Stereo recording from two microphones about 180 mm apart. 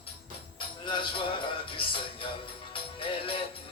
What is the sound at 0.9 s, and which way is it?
Music, 25° left (ahead or behind).